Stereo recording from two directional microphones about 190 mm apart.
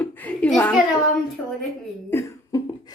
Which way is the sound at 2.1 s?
15° left (ahead or behind).